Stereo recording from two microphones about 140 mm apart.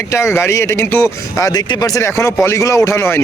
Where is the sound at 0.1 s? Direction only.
20° left (ahead or behind).